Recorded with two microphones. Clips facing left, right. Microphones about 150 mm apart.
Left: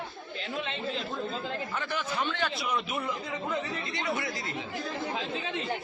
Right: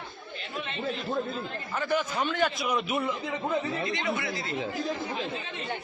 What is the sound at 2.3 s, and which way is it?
Speech, 10° right (ahead or behind).